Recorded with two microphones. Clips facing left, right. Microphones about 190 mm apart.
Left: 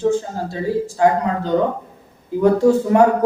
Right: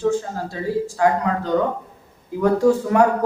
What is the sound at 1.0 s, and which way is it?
Speech, 25° left (ahead or behind).